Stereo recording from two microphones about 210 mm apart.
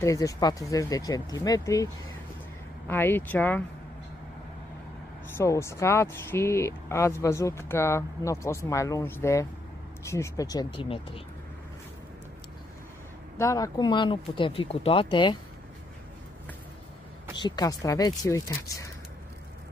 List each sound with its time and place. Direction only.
0.0 s speech: 15° left (ahead or behind)
2.9 s speech: 10° left (ahead or behind)
5.4 s speech: 15° left (ahead or behind)
13.4 s speech: 15° left (ahead or behind)
17.4 s speech: 20° left (ahead or behind)